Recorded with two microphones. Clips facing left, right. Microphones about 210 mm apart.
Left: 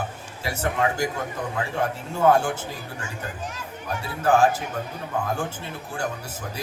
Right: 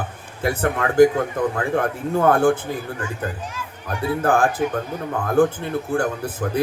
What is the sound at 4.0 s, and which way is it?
Speech, 55° right (ahead or behind).